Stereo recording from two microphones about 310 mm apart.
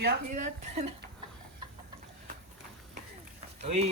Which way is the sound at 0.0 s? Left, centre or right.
Right.